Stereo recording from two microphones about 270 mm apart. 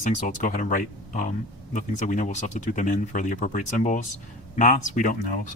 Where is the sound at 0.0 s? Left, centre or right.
Left.